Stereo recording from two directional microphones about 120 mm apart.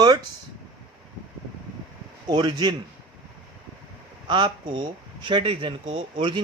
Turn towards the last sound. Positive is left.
turn(degrees=-60)  # may be behind; listen again after turning